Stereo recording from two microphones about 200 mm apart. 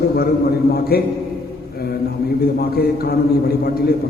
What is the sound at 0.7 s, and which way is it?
Speech, 50° left (ahead or behind).